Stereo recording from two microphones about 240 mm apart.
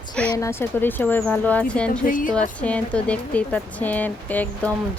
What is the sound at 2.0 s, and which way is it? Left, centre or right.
Speech, left.